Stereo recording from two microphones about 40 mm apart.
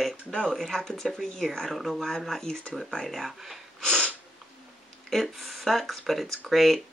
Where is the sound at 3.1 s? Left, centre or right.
Centre.